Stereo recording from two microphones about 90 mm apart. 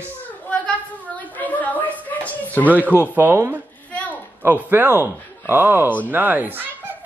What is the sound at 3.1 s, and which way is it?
A child's voice, 25° right (ahead or behind).